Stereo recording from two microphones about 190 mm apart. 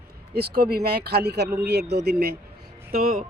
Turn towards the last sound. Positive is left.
turn(degrees=-45)  # may be behind; listen again after turning